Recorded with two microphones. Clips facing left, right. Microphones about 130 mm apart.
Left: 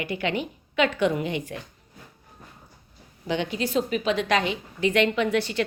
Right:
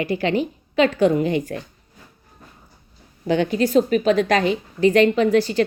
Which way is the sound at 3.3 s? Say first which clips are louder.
Right 8 dB; 45° right (ahead or behind).